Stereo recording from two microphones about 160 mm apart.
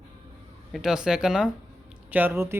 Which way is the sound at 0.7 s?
5° right (ahead or behind).